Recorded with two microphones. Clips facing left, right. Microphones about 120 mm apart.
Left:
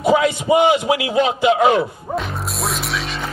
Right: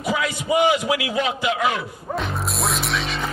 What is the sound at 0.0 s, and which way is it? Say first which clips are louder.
A man's voice: left 8 dB; 25° left (ahead or behind).